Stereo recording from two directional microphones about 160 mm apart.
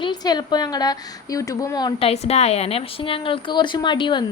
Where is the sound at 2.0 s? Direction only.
40° left (ahead or behind).